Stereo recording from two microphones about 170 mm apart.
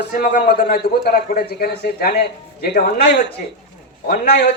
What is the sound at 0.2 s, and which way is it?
A man's voice, 65° left (ahead or behind).